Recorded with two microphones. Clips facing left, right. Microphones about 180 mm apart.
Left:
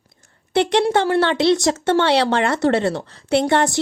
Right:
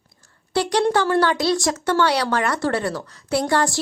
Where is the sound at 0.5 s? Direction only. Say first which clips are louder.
Left 2 dB; 25° left (ahead or behind).